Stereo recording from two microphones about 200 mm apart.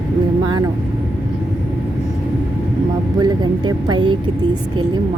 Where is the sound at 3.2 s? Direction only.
20° right (ahead or behind).